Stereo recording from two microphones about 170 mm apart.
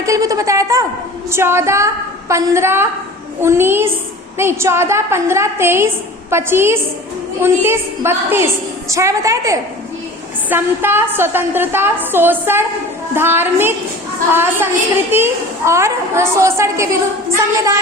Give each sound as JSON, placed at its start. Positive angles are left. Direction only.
{"t": 0.0, "sound": "a woman's voice", "side_deg": -20}